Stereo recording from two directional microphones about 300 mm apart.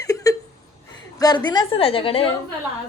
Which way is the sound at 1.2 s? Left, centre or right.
Centre.